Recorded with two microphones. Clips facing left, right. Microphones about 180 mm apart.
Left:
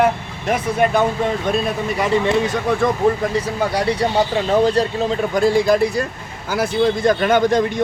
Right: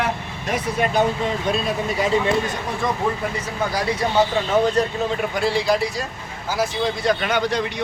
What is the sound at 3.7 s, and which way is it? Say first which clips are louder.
Speech: left 2 dB; 30° left (ahead or behind).